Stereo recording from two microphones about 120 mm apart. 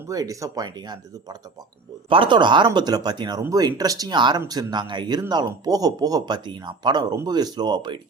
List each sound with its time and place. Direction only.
0.1 s speech: 30° right (ahead or behind)